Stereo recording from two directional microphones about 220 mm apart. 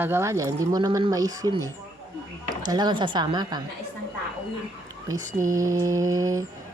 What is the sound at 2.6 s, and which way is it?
Speech, 20° right (ahead or behind).